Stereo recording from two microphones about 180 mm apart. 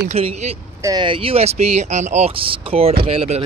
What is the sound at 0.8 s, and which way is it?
Speech, 20° right (ahead or behind).